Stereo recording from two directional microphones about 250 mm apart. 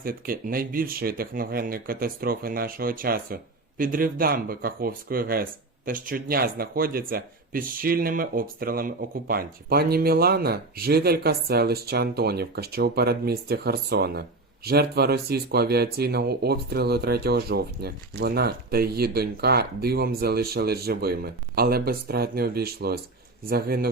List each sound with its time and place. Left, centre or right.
0.0 s speech: right